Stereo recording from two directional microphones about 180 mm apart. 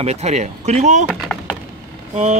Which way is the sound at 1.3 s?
5° left (ahead or behind).